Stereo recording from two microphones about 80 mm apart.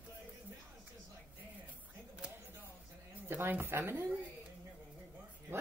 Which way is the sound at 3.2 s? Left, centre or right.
Right.